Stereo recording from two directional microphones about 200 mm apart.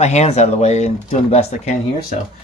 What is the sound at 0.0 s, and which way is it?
Speech, 35° left (ahead or behind).